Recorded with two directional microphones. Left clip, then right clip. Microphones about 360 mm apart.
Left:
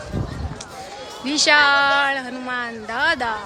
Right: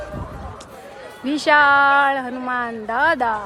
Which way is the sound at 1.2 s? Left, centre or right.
Centre.